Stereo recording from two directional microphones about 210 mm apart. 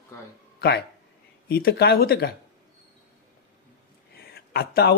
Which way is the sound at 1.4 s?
50° left (ahead or behind).